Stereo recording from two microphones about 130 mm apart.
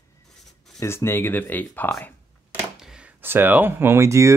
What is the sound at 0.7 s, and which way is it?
Speech, 20° left (ahead or behind).